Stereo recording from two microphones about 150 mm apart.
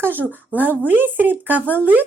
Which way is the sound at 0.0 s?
10° right (ahead or behind).